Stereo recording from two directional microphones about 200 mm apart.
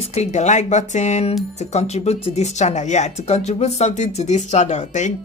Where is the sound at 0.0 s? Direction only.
30° left (ahead or behind).